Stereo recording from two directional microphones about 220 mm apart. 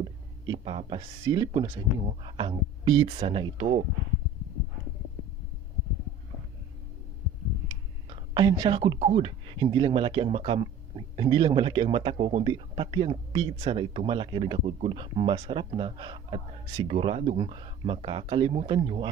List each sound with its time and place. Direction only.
0.0 s speech: 25° right (ahead or behind)
7.6 s speech: 20° right (ahead or behind)